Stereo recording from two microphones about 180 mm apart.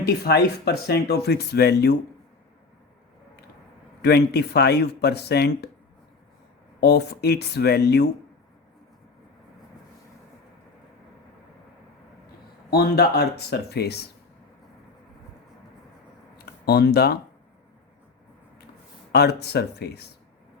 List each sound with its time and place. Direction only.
0.0 s speech: 65° left (ahead or behind)
4.0 s speech: 65° left (ahead or behind)
6.7 s speech: 65° left (ahead or behind)
12.7 s speech: 60° left (ahead or behind)
16.6 s speech: 60° left (ahead or behind)
19.1 s speech: 65° left (ahead or behind)